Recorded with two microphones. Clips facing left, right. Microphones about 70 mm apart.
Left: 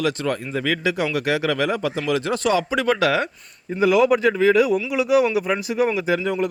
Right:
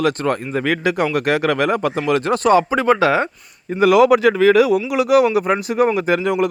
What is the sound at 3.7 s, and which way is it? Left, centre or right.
Speech, right.